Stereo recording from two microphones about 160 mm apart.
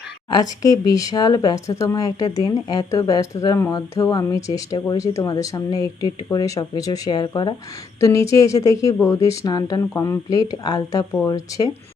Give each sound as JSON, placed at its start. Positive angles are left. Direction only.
{"t": 0.3, "sound": "speech", "side_deg": 25}